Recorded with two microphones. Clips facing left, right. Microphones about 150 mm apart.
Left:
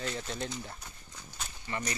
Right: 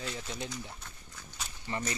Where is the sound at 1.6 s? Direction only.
25° right (ahead or behind).